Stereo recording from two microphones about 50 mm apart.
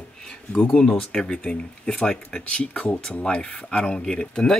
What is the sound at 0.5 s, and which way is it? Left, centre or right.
Speech, centre.